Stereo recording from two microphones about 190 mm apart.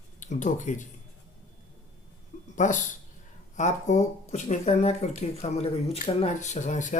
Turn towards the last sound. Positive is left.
turn(degrees=40)  # may be behind; listen again after turning